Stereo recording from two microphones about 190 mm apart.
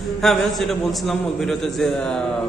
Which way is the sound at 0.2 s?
Centre (ahead or behind).